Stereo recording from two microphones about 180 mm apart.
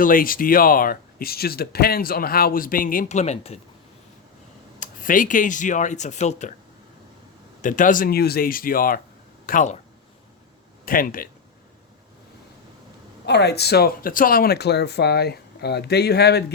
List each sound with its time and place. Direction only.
0.0 s speech: 50° left (ahead or behind)
4.8 s speech: 50° left (ahead or behind)
7.6 s speech: 45° left (ahead or behind)
10.8 s speech: 50° left (ahead or behind)
13.2 s speech: 65° left (ahead or behind)